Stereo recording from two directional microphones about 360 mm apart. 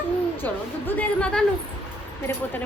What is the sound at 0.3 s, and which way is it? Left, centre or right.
A woman's voice, centre.